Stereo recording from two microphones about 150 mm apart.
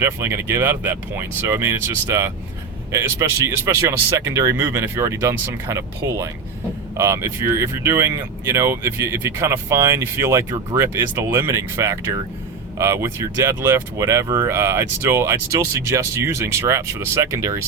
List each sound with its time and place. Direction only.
0.0 s speech: 15° right (ahead or behind)